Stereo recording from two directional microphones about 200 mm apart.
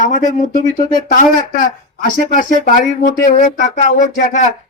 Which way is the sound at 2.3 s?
40° left (ahead or behind).